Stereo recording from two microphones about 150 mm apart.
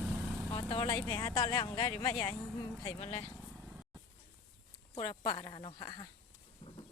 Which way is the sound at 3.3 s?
Centre (ahead or behind).